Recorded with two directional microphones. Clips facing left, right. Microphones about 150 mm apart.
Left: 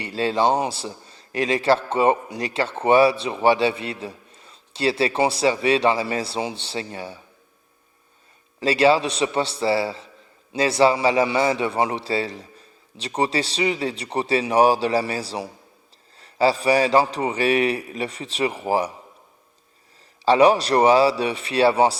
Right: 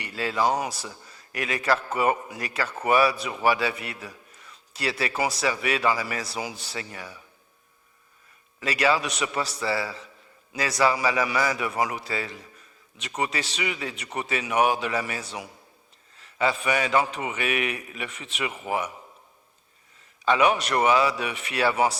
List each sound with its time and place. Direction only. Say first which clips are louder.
0.0 s a man's voice: left 5 dB; 30° left (ahead or behind)
8.6 s a man's voice: left 7 dB; 30° left (ahead or behind)
20.2 s a man's voice: left 6 dB; 35° left (ahead or behind)